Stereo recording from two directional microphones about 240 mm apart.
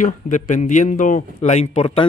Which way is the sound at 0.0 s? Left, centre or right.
Left.